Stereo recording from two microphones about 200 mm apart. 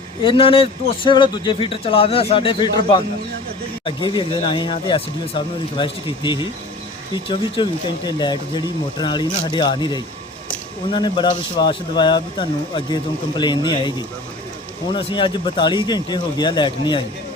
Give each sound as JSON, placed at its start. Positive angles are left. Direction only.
{"t": 0.2, "sound": "a man's voice", "side_deg": 25}
{"t": 14.9, "sound": "a man's voice", "side_deg": 25}